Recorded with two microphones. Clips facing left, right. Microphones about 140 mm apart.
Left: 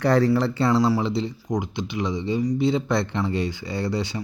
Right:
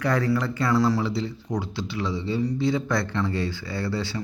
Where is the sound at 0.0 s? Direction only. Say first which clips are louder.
Left 5 dB; 30° left (ahead or behind).